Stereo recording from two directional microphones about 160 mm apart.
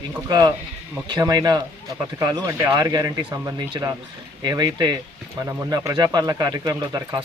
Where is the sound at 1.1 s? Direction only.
25° right (ahead or behind).